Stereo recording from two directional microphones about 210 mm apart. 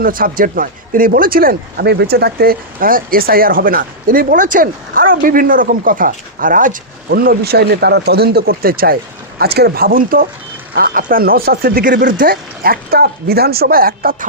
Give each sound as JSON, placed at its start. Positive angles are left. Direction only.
{"t": 0.0, "sound": "speech", "side_deg": -40}